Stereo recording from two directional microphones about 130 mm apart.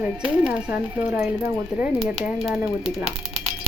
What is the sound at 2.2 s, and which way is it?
Speech, centre (ahead or behind).